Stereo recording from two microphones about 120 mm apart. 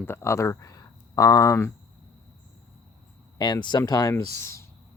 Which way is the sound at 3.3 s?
35° left (ahead or behind).